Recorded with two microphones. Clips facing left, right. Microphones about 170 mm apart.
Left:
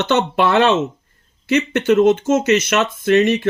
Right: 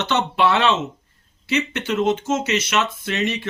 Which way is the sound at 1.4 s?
45° left (ahead or behind).